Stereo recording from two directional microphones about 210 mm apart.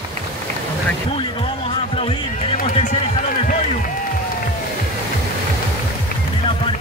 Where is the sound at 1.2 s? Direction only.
25° left (ahead or behind).